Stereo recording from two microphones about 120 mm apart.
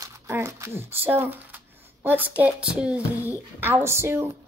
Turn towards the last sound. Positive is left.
turn(degrees=-20)  # may be behind; listen again after turning